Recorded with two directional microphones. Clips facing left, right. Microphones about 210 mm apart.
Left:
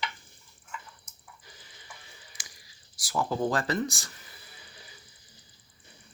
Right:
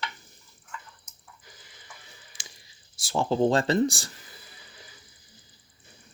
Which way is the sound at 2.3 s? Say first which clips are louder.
Right 2 dB; 25° right (ahead or behind).